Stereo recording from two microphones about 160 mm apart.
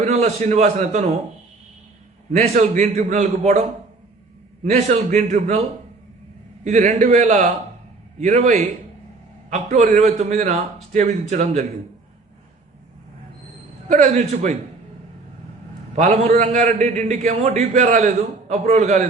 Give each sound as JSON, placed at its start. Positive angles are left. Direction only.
{"t": 0.0, "sound": "a man's voice", "side_deg": -45}
{"t": 2.3, "sound": "a man's voice", "side_deg": -45}
{"t": 4.7, "sound": "a man's voice", "side_deg": -45}
{"t": 6.7, "sound": "a man's voice", "side_deg": -50}
{"t": 13.8, "sound": "a man's voice", "side_deg": -50}
{"t": 16.0, "sound": "a man's voice", "side_deg": -50}